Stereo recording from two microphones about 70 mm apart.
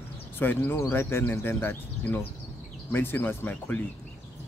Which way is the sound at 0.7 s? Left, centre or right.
Left.